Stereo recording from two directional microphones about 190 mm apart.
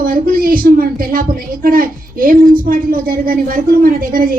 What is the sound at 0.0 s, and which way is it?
A woman's voice, 50° right (ahead or behind).